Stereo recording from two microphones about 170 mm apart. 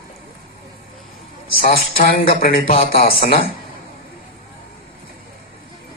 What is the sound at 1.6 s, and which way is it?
Music, 60° left (ahead or behind).